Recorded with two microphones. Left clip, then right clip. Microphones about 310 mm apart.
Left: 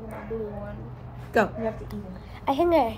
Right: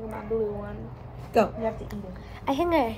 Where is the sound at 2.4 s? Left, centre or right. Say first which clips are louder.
Left 3 dB; centre.